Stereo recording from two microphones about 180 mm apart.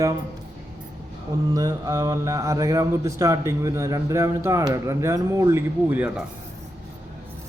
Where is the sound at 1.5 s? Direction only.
20° right (ahead or behind).